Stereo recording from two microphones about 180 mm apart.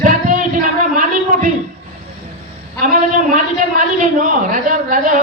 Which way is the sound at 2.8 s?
50° right (ahead or behind).